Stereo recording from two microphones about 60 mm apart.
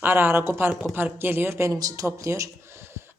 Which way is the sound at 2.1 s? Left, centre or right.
Right.